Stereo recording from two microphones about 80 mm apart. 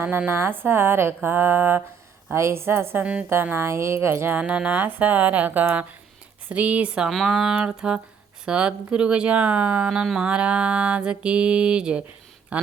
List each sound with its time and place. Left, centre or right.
0.3 s music: right
2.3 s a sound: right
3.0 s speech: centre
3.4 s a sound: right
4.4 s music: centre
6.5 s speech: centre